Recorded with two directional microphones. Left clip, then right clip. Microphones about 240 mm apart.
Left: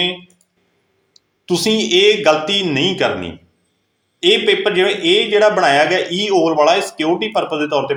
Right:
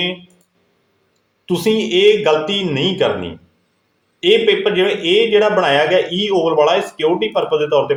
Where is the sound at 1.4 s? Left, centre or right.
Centre.